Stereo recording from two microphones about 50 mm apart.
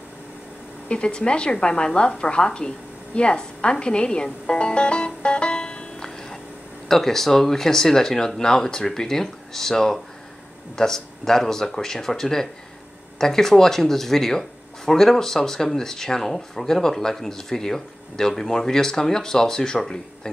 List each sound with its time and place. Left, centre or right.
0.8 s a woman's voice: left